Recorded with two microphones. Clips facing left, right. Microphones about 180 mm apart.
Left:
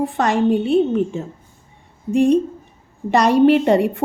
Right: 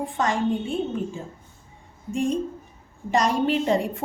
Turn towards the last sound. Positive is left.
turn(degrees=65)  # may be behind; listen again after turning